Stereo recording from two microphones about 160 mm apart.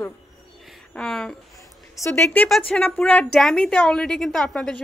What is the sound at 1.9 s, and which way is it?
A woman's voice, 15° left (ahead or behind).